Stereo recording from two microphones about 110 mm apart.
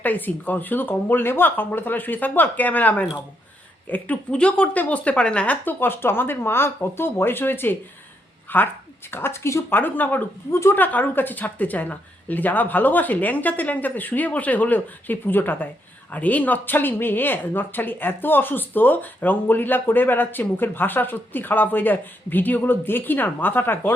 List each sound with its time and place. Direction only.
0.0 s speech: 15° left (ahead or behind)